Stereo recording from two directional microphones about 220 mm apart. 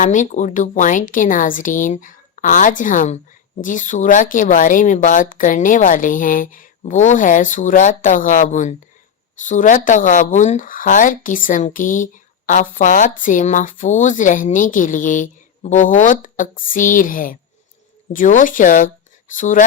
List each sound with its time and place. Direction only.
0.0 s speech: 35° left (ahead or behind)